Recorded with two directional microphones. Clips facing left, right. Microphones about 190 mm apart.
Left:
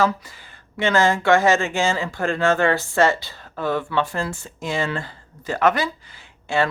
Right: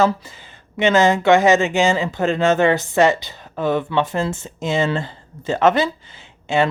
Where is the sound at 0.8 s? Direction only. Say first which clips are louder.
Right 4 dB; 20° right (ahead or behind).